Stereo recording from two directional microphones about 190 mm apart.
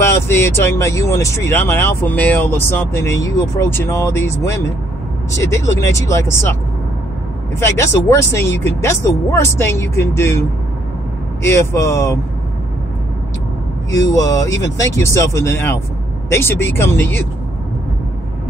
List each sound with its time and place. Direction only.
0.0 s speech: 15° left (ahead or behind)
8.3 s speech: 15° left (ahead or behind)
11.4 s speech: 15° left (ahead or behind)
13.9 s speech: 20° left (ahead or behind)